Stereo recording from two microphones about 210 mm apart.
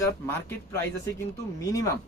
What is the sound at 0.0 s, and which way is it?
Speech, 10° left (ahead or behind).